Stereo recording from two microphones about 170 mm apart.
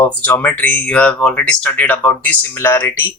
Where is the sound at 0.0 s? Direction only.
10° left (ahead or behind).